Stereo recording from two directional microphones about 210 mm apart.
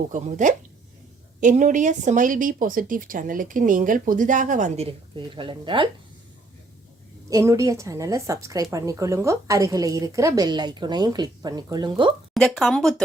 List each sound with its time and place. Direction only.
0.1 s speech: 35° right (ahead or behind)
7.3 s a woman's voice: 15° right (ahead or behind)
12.3 s speech: centre (ahead or behind)